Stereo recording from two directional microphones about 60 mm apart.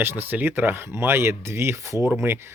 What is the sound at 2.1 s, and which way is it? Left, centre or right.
Speech, right.